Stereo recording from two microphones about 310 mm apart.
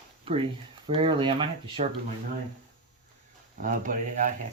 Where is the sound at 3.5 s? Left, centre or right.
Right.